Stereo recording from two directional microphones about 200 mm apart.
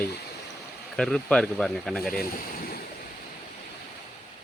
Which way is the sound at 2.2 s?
45° left (ahead or behind).